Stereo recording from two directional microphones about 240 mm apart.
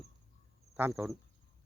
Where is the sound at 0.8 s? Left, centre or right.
Centre.